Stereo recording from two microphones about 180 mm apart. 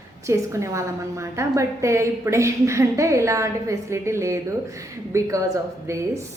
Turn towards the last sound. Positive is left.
turn(degrees=-15)  # may be behind; listen again after turning